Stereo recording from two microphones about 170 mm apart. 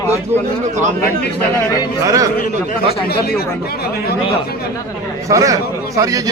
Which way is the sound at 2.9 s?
65° left (ahead or behind).